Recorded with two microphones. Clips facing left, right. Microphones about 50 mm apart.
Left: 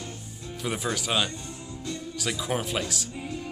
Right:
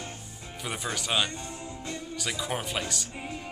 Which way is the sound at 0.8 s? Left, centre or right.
Centre.